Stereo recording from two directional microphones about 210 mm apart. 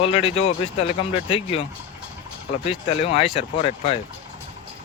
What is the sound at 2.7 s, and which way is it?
Speech, 25° left (ahead or behind).